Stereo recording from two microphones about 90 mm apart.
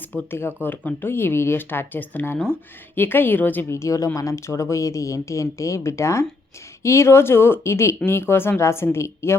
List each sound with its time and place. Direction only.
0.3 s speech: 25° left (ahead or behind)
3.8 s speech: 35° left (ahead or behind)